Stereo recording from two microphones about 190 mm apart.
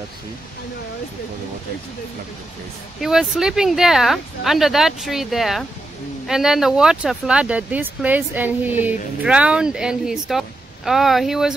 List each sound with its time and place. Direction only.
3.0 s speech: 5° right (ahead or behind)